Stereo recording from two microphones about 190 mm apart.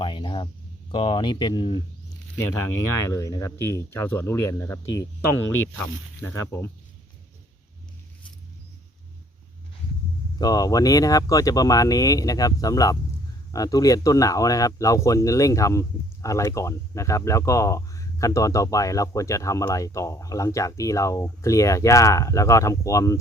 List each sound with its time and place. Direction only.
0.0 s a sound: 25° left (ahead or behind)
0.9 s speech: 25° left (ahead or behind); by 5.9 s 10° left (ahead or behind)
10.3 s speech: 20° left (ahead or behind)